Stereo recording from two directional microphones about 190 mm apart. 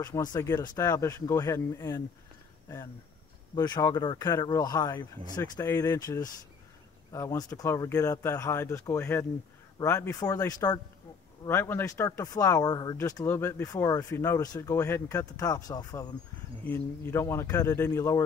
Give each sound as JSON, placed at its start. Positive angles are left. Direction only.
{"t": 0.0, "sound": "speech", "side_deg": 20}
{"t": 3.5, "sound": "speech", "side_deg": 20}